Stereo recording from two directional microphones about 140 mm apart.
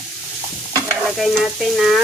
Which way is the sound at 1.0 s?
Centre (ahead or behind).